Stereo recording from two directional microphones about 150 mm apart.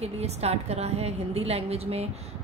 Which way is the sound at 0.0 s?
45° right (ahead or behind).